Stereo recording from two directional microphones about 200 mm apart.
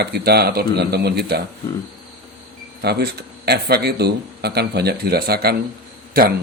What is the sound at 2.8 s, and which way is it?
A man's voice, 55° right (ahead or behind).